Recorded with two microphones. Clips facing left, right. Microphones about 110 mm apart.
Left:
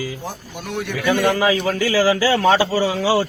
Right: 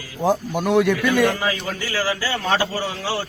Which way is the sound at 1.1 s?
90° left.